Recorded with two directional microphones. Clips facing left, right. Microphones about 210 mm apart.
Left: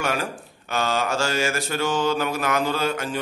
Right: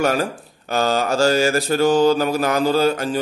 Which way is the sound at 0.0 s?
40° right (ahead or behind).